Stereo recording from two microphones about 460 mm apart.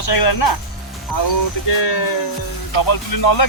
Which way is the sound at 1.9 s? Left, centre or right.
Left.